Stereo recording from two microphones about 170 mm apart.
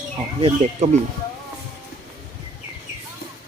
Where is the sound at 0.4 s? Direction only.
35° right (ahead or behind).